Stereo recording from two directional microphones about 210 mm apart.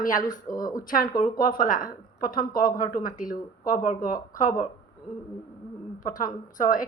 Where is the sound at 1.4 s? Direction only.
40° left (ahead or behind).